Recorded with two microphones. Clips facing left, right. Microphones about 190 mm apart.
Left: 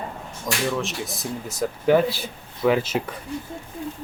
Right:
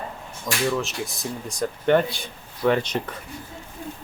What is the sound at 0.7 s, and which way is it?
Speech, centre (ahead or behind).